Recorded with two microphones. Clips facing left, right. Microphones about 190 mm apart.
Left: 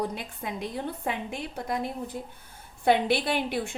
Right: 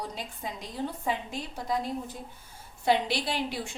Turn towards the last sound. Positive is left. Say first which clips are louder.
# left 4 dB
turn(degrees=55)  # may be behind; listen again after turning